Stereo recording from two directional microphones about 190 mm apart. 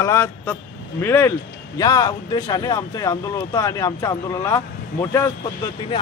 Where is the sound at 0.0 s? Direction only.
15° left (ahead or behind).